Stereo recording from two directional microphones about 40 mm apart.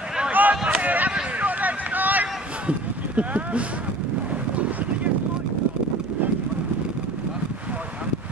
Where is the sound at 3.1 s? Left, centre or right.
Right.